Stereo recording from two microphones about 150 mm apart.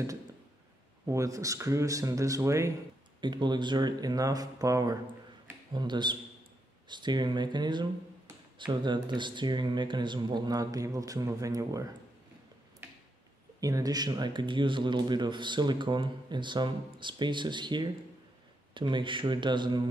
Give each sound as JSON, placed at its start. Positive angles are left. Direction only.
{"t": 1.0, "sound": "speech", "side_deg": -20}
{"t": 13.6, "sound": "speech", "side_deg": -25}